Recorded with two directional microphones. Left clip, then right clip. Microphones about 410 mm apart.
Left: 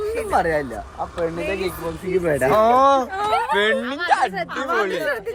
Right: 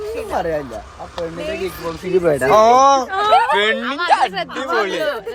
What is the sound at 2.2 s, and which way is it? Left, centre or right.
Speech, centre.